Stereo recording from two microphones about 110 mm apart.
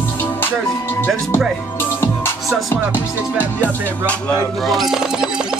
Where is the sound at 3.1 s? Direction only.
15° right (ahead or behind).